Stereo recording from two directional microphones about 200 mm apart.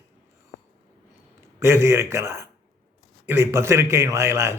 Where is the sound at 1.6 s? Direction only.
15° right (ahead or behind).